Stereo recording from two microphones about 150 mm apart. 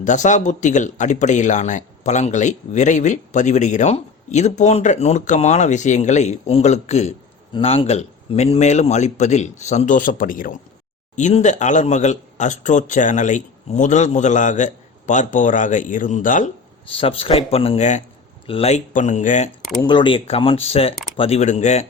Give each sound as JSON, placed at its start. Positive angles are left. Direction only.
{"t": 0.0, "sound": "speech", "side_deg": 55}
{"t": 11.1, "sound": "speech", "side_deg": 50}
{"t": 17.0, "sound": "speech", "side_deg": 40}
{"t": 18.4, "sound": "speech", "side_deg": 40}
{"t": 19.8, "sound": "speech", "side_deg": 30}